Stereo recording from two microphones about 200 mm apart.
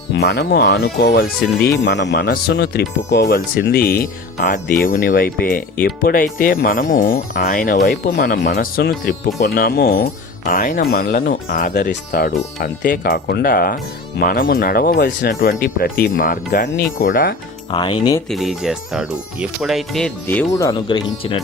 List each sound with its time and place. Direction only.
0.1 s speech: 55° left (ahead or behind)
1.8 s speech: 60° left (ahead or behind); by 17.3 s 45° left (ahead or behind)
17.7 s speech: 25° left (ahead or behind)
18.3 s speech: centre (ahead or behind); by 21.4 s 25° left (ahead or behind)